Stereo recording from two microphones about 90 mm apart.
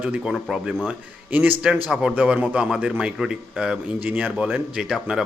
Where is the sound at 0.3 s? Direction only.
Centre (ahead or behind).